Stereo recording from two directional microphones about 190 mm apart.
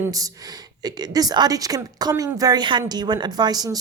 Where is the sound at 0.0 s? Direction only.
20° right (ahead or behind).